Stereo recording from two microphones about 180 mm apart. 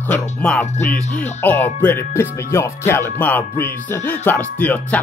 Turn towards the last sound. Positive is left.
turn(degrees=10)  # may be behind; listen again after turning